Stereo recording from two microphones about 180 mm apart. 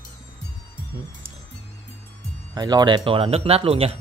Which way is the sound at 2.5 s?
20° right (ahead or behind).